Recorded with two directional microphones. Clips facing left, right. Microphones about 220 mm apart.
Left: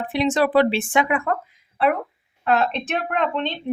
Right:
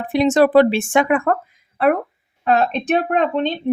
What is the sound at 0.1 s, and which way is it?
Speech, 45° right (ahead or behind).